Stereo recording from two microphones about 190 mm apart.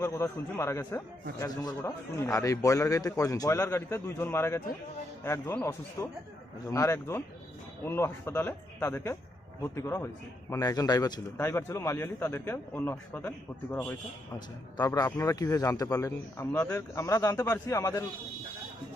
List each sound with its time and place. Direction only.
0.0 s a man's voice: 15° left (ahead or behind)